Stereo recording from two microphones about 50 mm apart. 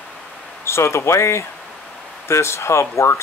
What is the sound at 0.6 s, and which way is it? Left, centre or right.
Speech, left.